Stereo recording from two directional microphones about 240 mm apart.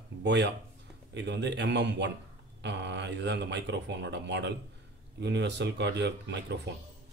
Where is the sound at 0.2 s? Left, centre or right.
Right.